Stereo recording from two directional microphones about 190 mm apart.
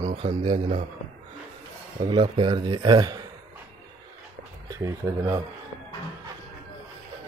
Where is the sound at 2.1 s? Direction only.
25° right (ahead or behind).